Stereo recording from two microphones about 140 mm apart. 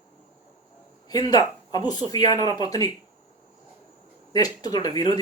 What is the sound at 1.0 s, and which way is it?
A woman's voice, 30° left (ahead or behind).